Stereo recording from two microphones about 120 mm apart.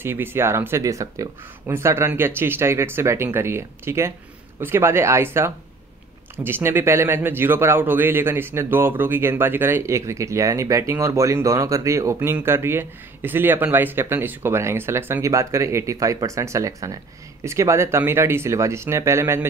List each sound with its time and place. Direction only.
0.0 s speech: 20° right (ahead or behind)